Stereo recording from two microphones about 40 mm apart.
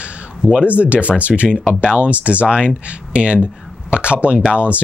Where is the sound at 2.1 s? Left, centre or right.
Right.